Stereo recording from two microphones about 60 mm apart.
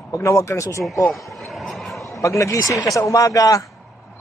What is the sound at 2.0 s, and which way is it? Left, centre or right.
Speech, left.